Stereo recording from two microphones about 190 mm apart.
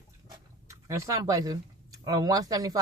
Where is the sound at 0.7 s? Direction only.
15° right (ahead or behind).